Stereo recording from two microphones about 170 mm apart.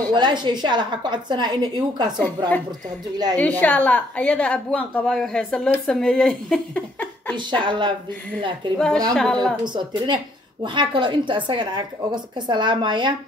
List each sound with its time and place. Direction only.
0.1 s a woman's voice: 25° right (ahead or behind)
3.3 s a woman's voice: 10° left (ahead or behind)
7.3 s a woman's voice: 25° right (ahead or behind)
8.7 s a woman's voice: 5° left (ahead or behind)
9.8 s a woman's voice: 25° right (ahead or behind)